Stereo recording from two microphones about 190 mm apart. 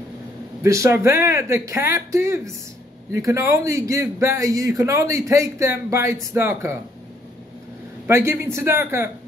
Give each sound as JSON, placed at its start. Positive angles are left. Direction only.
{"t": 0.6, "sound": "a man's voice", "side_deg": -15}
{"t": 8.1, "sound": "a man's voice", "side_deg": -15}